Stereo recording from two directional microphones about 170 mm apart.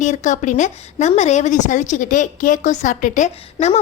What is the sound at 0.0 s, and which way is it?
A woman's voice, 45° left (ahead or behind).